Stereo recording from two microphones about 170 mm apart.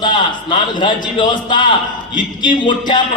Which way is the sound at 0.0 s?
25° left (ahead or behind).